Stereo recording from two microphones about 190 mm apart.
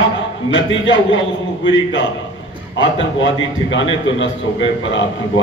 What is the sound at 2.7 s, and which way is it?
A man's voice, 75° left (ahead or behind).